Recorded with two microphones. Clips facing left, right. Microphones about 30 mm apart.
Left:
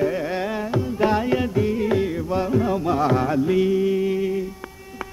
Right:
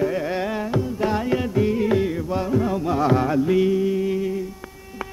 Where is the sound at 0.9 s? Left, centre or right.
Centre.